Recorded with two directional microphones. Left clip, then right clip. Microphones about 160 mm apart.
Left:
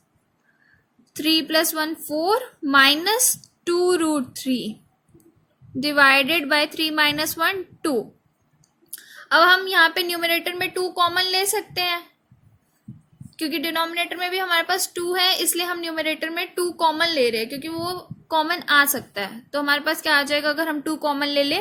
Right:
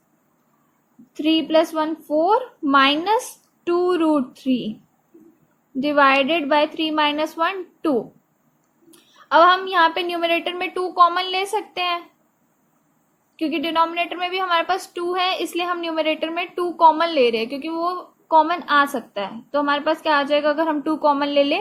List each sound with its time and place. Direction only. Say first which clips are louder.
1.1 s a woman's voice: right 2 dB; 55° left (ahead or behind)
5.8 s a woman's voice: even; 60° left (ahead or behind)
9.3 s a woman's voice: right 1 dB; 55° left (ahead or behind)
13.3 s a woman's voice: right 3 dB; 60° left (ahead or behind)